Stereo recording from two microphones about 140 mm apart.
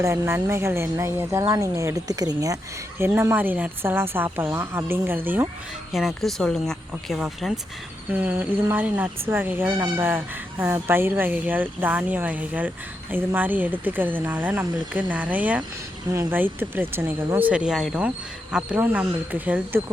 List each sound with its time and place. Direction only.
0.0 s speech: 20° right (ahead or behind)
5.9 s speech: centre (ahead or behind)
8.1 s speech: 15° right (ahead or behind)